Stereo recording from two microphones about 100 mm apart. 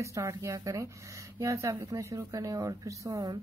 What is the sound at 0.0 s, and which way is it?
Speech, 30° right (ahead or behind).